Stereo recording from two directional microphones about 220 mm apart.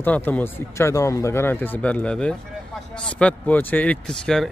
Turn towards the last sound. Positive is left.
turn(degrees=5)  # may be behind; listen again after turning